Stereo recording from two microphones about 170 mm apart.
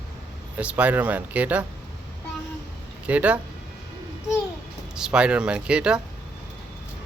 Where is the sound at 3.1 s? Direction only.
10° right (ahead or behind).